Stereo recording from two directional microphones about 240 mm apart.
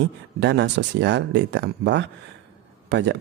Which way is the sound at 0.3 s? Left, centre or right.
Right.